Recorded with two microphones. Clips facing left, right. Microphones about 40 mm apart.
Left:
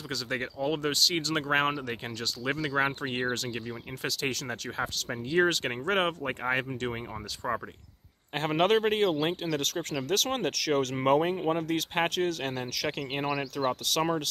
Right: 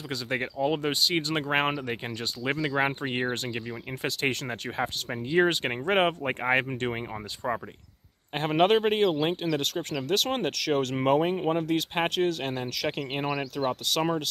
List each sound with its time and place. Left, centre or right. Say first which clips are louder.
0.1 s speech: right 2 dB; centre
7.4 s speech: right 1 dB; centre